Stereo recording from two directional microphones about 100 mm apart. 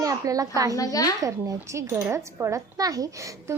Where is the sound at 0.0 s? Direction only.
35° right (ahead or behind).